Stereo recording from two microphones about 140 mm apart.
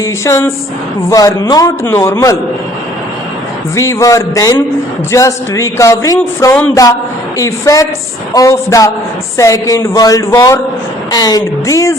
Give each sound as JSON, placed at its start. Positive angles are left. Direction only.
{"t": 0.0, "sound": "a man's voice", "side_deg": 20}
{"t": 3.8, "sound": "a man's voice", "side_deg": 20}